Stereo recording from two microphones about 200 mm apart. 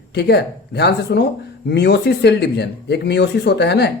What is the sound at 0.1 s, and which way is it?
Speech, 55° left (ahead or behind).